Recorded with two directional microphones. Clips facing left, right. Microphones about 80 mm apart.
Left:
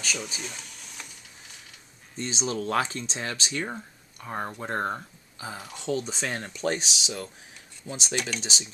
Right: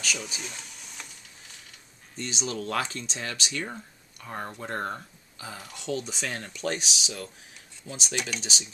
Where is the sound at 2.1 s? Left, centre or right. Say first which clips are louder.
Left 3 dB; left.